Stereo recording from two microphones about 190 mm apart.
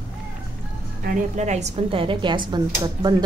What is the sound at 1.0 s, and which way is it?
A woman's voice, 35° right (ahead or behind).